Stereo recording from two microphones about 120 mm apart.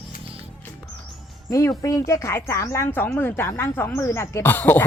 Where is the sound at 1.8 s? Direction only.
25° left (ahead or behind).